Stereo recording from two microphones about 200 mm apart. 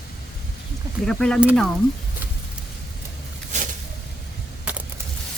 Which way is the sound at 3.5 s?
35° right (ahead or behind).